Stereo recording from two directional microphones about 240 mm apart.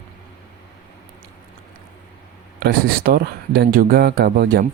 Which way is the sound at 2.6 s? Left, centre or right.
Right.